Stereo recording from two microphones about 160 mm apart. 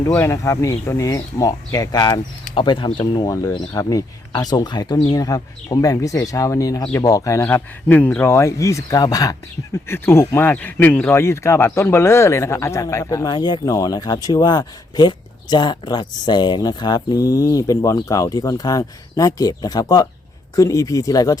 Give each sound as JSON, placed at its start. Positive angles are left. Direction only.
{"t": 0.0, "sound": "speech", "side_deg": 15}